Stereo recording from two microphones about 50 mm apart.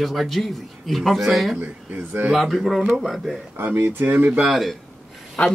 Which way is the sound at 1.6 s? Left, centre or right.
Right.